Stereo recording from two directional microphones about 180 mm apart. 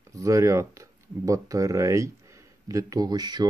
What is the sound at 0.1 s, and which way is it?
Speech, 20° right (ahead or behind).